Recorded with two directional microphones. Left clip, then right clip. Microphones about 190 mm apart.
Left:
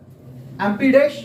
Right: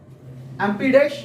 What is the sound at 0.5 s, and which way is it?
Speech, 10° right (ahead or behind).